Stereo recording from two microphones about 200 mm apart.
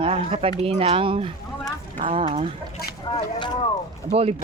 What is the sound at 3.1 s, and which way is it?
Speech, 25° left (ahead or behind).